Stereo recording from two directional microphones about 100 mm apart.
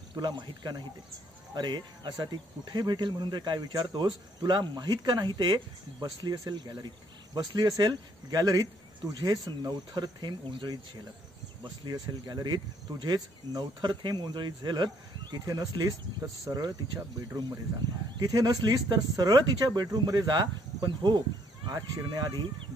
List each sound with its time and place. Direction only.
0.1 s speech: 50° right (ahead or behind)
18.2 s speech: 40° right (ahead or behind)